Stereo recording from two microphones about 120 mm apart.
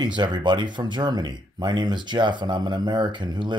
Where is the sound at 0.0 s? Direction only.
35° right (ahead or behind).